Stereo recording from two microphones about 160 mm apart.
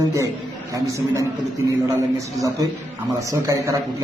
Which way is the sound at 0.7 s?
20° right (ahead or behind).